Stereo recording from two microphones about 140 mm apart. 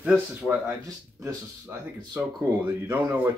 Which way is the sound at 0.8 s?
20° right (ahead or behind).